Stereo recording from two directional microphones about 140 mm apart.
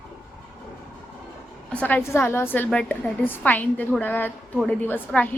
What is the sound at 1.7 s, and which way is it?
A woman's voice, 10° left (ahead or behind).